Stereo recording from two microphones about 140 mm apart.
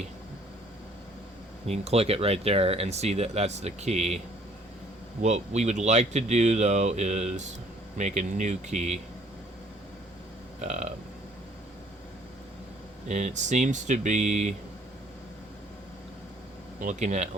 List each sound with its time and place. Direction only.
1.6 s speech: 50° right (ahead or behind)
5.2 s speech: 55° right (ahead or behind)
10.6 s speech: 55° right (ahead or behind)
13.1 s speech: 60° right (ahead or behind)
16.8 s speech: 60° right (ahead or behind)